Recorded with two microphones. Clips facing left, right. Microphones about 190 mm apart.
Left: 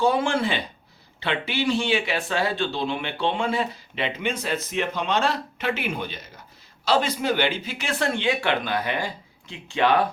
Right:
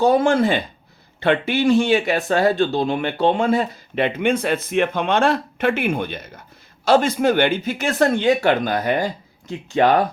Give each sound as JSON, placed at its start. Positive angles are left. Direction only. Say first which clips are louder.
{"t": 0.0, "sound": "speech", "louder": "right 6 dB", "side_deg": -45}